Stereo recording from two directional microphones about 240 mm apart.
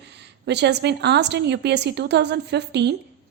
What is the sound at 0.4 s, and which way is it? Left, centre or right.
A woman's voice, right.